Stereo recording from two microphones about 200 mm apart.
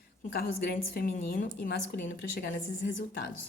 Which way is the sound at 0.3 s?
50° left (ahead or behind).